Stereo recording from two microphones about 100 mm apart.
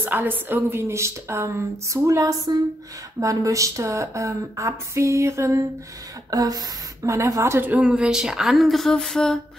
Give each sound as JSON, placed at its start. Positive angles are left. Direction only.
{"t": 0.0, "sound": "a woman's voice", "side_deg": -20}
{"t": 7.7, "sound": "speech", "side_deg": -10}